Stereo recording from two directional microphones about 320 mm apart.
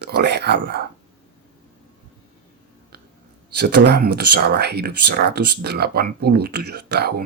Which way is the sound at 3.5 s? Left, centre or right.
Right.